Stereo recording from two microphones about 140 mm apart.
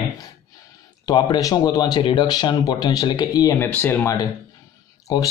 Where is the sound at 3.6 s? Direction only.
15° left (ahead or behind).